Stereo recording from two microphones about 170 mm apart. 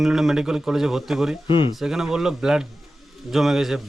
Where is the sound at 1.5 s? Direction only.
30° left (ahead or behind).